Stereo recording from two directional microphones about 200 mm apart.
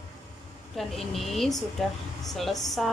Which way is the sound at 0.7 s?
Centre (ahead or behind).